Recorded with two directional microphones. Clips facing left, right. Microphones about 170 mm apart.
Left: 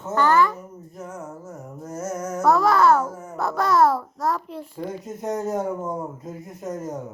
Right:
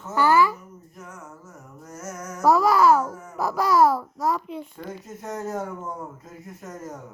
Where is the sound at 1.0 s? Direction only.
25° left (ahead or behind).